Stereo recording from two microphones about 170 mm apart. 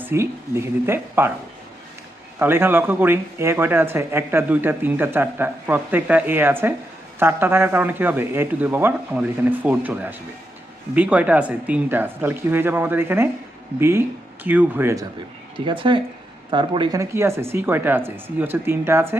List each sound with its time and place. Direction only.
0.0 s speech: 15° right (ahead or behind)
2.4 s speech: 15° right (ahead or behind)
15.5 s speech: 30° right (ahead or behind); by 19.1 s 15° right (ahead or behind)